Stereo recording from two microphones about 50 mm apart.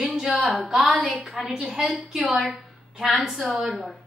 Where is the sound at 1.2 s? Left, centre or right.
Centre.